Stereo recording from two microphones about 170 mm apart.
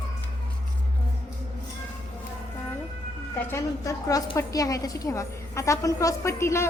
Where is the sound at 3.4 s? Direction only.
15° left (ahead or behind).